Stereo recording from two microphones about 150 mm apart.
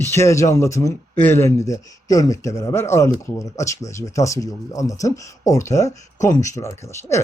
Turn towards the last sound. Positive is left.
turn(degrees=20)  # may be behind; listen again after turning